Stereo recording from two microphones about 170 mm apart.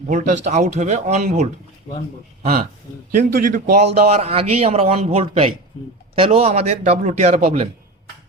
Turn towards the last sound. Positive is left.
turn(degrees=-40)  # may be behind; listen again after turning